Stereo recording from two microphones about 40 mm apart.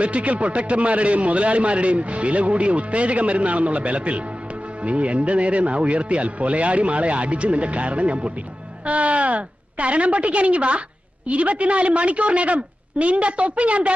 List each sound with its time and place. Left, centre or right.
0.0 s a man's voice: right